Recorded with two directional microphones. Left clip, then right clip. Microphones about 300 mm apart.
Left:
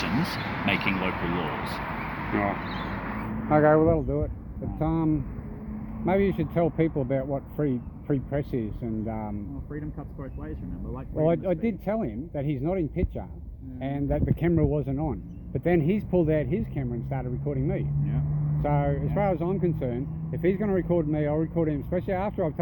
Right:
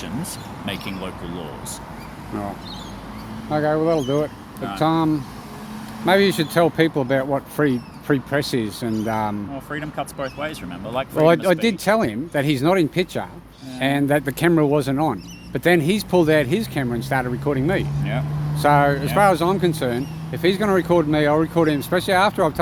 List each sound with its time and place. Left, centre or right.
0.6 s speech: centre
3.5 s speech: right
6.1 s speech: right
11.1 s speech: right